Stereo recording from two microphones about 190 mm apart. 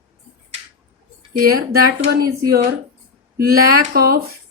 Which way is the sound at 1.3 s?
50° right (ahead or behind).